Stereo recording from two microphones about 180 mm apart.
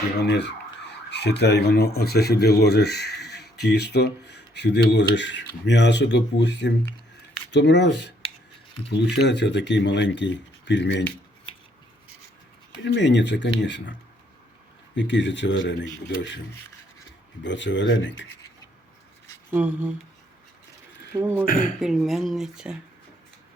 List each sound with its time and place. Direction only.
0.2 s speech: 70° left (ahead or behind)
12.8 s speech: 75° left (ahead or behind)
14.9 s speech: 85° left
17.4 s speech: 85° left
19.5 s speech: 10° right (ahead or behind)
21.1 s speech: 15° right (ahead or behind)
21.4 s speech: 55° left (ahead or behind)
21.8 s speech: centre (ahead or behind)